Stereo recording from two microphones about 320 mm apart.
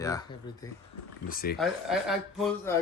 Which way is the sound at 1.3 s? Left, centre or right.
Left.